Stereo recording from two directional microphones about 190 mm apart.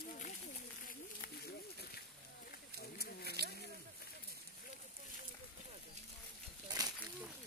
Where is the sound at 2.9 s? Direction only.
55° left (ahead or behind).